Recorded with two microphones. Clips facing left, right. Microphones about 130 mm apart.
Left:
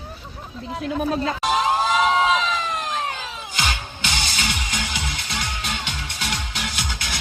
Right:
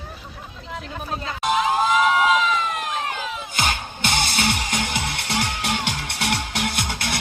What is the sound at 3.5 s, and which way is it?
Music, 50° right (ahead or behind).